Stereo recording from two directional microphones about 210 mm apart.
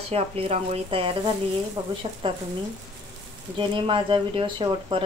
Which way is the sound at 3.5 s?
25° right (ahead or behind).